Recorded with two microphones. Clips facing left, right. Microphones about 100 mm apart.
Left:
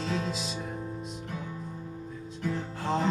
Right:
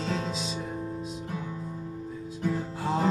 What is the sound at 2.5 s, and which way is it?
Music, 5° right (ahead or behind).